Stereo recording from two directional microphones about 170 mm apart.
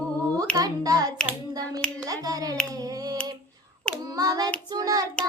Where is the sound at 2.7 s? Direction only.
20° right (ahead or behind).